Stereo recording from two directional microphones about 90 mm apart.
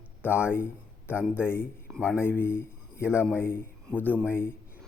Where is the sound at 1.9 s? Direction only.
10° right (ahead or behind).